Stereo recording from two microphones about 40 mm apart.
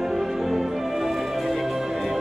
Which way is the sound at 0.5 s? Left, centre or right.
Centre.